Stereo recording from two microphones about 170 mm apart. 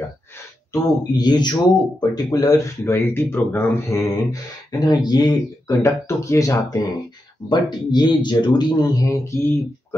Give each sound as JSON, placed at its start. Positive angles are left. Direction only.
{"t": 0.8, "sound": "speech", "side_deg": 25}